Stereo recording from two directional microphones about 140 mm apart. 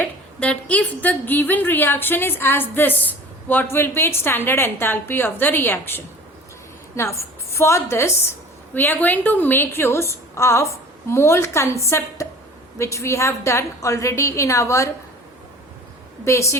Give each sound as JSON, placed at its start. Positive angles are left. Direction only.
{"t": 0.0, "sound": "a woman's voice", "side_deg": 10}
{"t": 16.2, "sound": "a woman's voice", "side_deg": 20}